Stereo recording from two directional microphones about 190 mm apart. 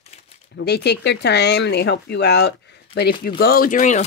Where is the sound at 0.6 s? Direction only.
60° left (ahead or behind).